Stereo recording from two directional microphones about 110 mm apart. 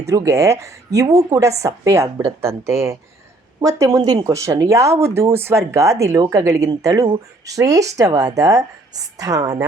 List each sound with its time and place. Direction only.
0.1 s speech: 30° right (ahead or behind)